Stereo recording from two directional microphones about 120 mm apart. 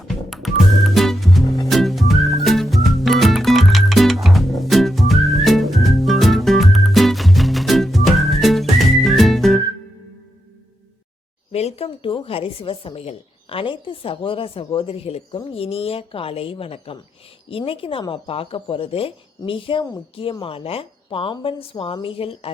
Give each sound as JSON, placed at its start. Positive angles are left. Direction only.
{"t": 0.1, "sound": "music", "side_deg": 0}
{"t": 11.5, "sound": "a woman's voice", "side_deg": 60}